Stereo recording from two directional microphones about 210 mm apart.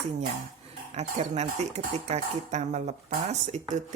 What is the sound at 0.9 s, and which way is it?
Speech, 30° right (ahead or behind).